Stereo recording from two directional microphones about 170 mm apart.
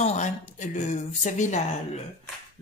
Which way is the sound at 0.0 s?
45° left (ahead or behind).